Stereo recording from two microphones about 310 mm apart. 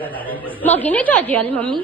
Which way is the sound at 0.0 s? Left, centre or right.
Centre.